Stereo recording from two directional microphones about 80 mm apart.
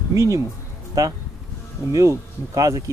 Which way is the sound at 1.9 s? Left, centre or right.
Right.